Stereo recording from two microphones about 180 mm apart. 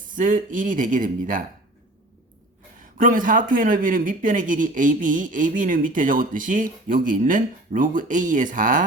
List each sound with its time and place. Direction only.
0.1 s speech: 45° right (ahead or behind)
3.0 s speech: 50° right (ahead or behind)